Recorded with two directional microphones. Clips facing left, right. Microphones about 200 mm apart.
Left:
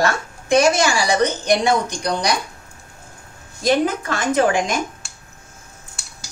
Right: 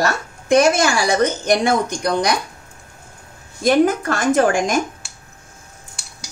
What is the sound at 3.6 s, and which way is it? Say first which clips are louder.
A woman's voice: right 3 dB; 50° right (ahead or behind).